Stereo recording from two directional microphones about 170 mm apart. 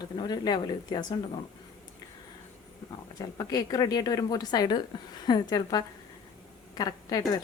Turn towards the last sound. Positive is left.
turn(degrees=20)  # may be behind; listen again after turning